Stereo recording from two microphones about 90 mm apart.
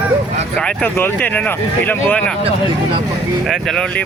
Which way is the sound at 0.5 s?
15° left (ahead or behind).